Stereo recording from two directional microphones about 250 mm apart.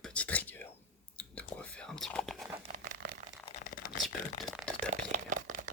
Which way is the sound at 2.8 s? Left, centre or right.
Right.